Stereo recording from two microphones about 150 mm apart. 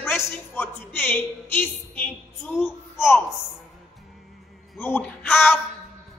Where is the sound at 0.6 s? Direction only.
15° left (ahead or behind).